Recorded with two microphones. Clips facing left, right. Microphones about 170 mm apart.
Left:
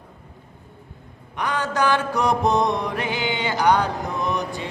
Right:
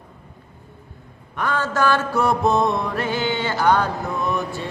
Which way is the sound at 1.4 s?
15° left (ahead or behind).